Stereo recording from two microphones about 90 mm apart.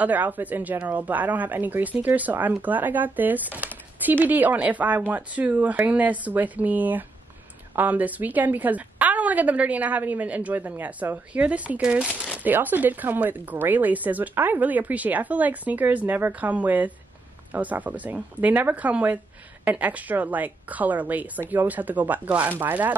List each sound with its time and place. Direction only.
0.0 s a woman's voice: 20° right (ahead or behind)